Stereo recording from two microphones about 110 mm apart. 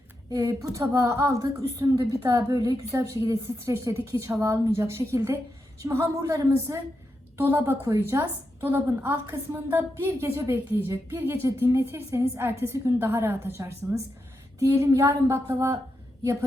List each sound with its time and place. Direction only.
0.3 s a woman's voice: 30° right (ahead or behind)